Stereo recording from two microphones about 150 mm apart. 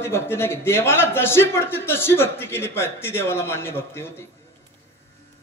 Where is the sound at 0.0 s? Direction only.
15° left (ahead or behind).